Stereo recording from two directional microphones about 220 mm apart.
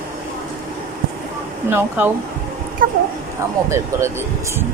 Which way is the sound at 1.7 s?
10° right (ahead or behind).